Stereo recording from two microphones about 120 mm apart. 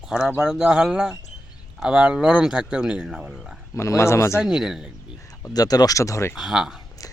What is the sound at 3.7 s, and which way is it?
Speech, 25° left (ahead or behind).